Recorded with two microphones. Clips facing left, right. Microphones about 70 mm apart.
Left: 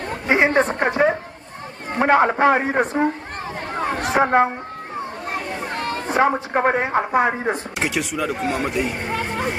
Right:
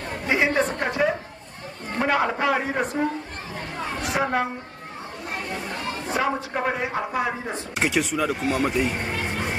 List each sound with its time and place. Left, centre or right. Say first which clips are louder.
0.3 s a sound: left 5 dB; left
2.0 s speech: left 7 dB; left
3.7 s chatter: left 7 dB; left
5.7 s chatter: left 5 dB; left
6.0 s speech: left 6 dB; left
7.8 s speech: right 1 dB; centre
8.4 s speech: left 1 dB; left
9.1 s a sound: left 4 dB; left